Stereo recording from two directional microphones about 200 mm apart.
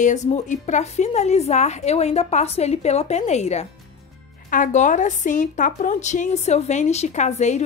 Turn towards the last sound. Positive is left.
turn(degrees=35)  # may be behind; listen again after turning